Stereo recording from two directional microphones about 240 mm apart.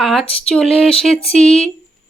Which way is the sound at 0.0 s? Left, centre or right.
Centre.